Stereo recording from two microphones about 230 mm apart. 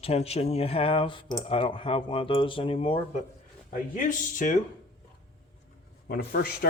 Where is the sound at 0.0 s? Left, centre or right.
Left.